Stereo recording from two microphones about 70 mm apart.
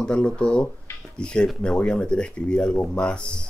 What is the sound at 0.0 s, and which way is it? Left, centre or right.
Speech, centre.